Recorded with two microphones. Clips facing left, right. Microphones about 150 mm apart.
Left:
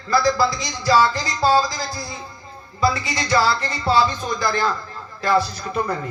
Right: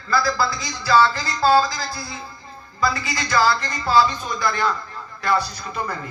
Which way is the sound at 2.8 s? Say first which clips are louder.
Left 2 dB; 30° left (ahead or behind).